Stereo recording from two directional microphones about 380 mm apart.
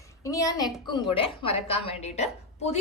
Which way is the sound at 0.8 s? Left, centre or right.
Centre.